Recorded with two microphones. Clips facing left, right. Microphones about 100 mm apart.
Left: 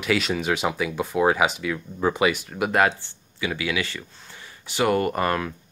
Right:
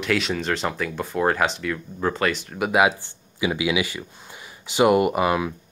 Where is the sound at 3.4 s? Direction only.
15° right (ahead or behind).